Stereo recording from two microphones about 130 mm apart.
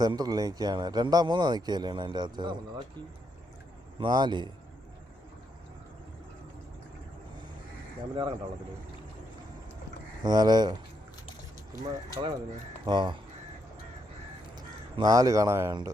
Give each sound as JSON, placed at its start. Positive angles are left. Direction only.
{"t": 0.0, "sound": "speech", "side_deg": -30}
{"t": 4.0, "sound": "speech", "side_deg": -35}
{"t": 8.1, "sound": "speech", "side_deg": -35}
{"t": 10.2, "sound": "speech", "side_deg": -30}
{"t": 11.9, "sound": "speech", "side_deg": -30}
{"t": 14.9, "sound": "speech", "side_deg": -30}